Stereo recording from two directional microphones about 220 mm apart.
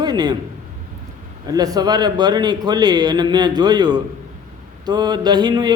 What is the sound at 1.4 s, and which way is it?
Speech, 15° right (ahead or behind).